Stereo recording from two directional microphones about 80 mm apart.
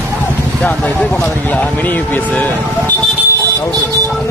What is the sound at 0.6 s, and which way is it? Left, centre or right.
Speech, centre.